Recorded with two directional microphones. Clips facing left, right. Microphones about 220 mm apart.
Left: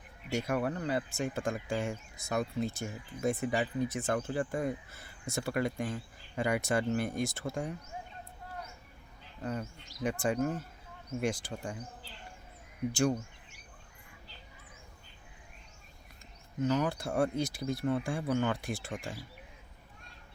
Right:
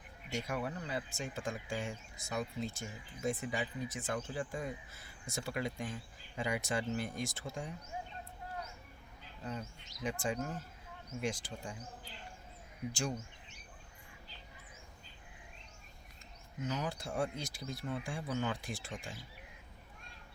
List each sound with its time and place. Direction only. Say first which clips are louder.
0.3 s speech: left 7 dB; 60° left (ahead or behind)
9.4 s speech: left 6 dB; 55° left (ahead or behind)
12.9 s speech: left 10 dB; 65° left (ahead or behind)
16.6 s speech: left 8 dB; 60° left (ahead or behind)